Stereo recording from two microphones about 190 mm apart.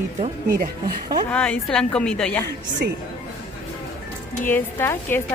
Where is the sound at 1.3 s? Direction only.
5° left (ahead or behind).